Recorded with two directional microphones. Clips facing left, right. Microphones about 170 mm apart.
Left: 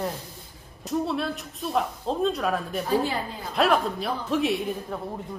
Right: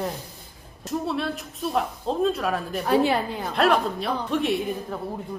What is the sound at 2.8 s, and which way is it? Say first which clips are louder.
Speech: right 7 dB; 70° right (ahead or behind).